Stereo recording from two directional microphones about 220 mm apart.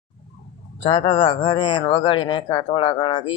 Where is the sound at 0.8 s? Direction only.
25° left (ahead or behind).